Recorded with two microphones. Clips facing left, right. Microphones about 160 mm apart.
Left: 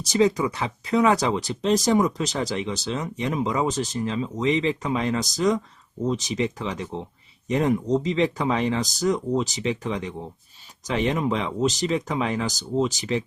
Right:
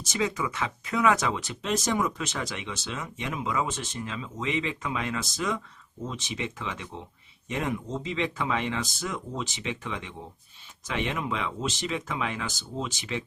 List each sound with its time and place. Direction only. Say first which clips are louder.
0.0 s speech: left 9 dB; 35° left (ahead or behind)